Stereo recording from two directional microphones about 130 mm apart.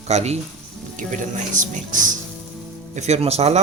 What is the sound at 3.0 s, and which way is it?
Speech, 55° right (ahead or behind).